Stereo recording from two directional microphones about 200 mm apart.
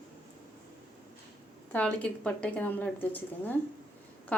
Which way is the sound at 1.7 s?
5° left (ahead or behind).